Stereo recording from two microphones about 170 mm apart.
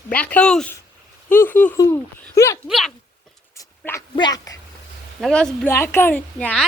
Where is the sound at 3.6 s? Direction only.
15° left (ahead or behind).